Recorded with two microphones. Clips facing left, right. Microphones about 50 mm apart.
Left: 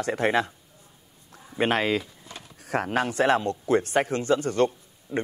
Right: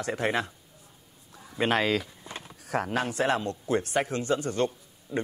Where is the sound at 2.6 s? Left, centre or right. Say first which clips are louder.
Left 3 dB; left.